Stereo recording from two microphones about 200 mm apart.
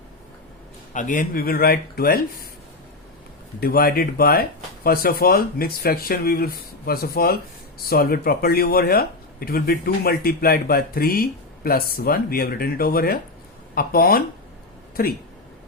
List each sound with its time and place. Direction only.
0.9 s speech: 40° left (ahead or behind)
3.6 s speech: 50° left (ahead or behind)